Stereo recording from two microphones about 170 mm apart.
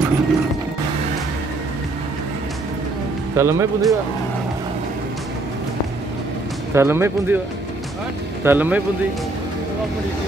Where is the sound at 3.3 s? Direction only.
15° right (ahead or behind).